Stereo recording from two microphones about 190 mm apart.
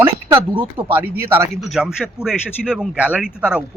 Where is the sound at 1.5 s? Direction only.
Centre (ahead or behind).